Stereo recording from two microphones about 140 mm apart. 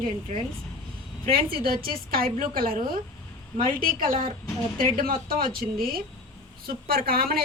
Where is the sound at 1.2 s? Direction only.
90° right.